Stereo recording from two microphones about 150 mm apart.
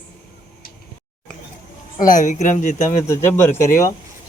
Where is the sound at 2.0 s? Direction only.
60° left (ahead or behind).